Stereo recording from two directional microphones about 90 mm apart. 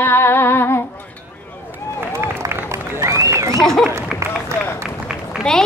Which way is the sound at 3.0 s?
35° right (ahead or behind).